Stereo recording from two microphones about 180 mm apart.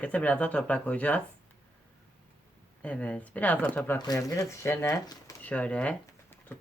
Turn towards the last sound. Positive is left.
turn(degrees=5)  # may be behind; listen again after turning